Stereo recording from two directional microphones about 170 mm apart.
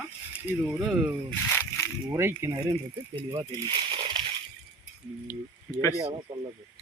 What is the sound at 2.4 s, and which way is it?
Speech, 20° right (ahead or behind).